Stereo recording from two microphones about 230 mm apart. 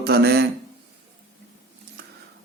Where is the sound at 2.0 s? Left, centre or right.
Right.